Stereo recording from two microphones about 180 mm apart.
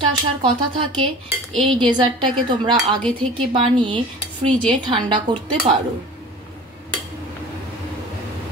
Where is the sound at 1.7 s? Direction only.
25° right (ahead or behind).